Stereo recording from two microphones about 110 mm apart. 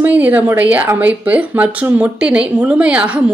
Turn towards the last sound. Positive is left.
turn(degrees=-10)  # may be behind; listen again after turning